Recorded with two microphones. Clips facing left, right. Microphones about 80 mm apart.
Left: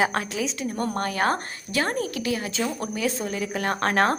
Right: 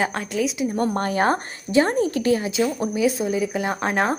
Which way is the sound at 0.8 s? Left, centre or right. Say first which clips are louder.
Right 4 dB; right.